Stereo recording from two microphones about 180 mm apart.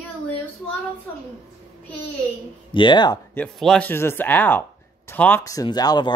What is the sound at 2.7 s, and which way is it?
Speech, 25° left (ahead or behind).